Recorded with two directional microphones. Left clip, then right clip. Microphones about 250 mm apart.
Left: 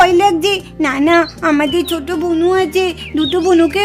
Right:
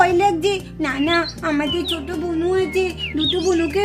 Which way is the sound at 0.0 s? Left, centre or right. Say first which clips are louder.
Left 6 dB; left.